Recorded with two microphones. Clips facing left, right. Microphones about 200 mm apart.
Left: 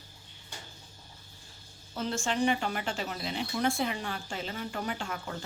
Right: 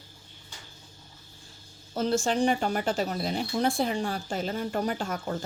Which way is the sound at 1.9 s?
40° right (ahead or behind).